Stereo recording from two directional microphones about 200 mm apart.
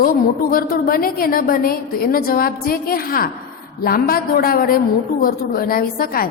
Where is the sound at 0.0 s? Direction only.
45° left (ahead or behind).